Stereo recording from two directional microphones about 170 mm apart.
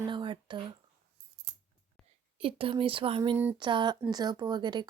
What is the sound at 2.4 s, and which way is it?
Speech, 30° right (ahead or behind).